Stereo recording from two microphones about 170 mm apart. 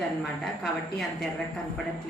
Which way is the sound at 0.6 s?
Centre (ahead or behind).